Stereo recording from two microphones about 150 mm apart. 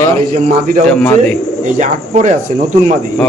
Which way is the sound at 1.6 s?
55° right (ahead or behind).